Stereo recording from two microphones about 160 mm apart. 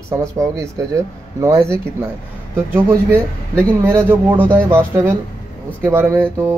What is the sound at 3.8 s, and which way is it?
Speech, 15° right (ahead or behind).